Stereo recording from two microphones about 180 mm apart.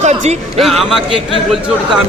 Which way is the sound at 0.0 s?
35° right (ahead or behind).